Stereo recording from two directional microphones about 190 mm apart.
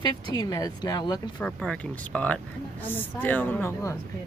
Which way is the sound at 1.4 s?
5° left (ahead or behind).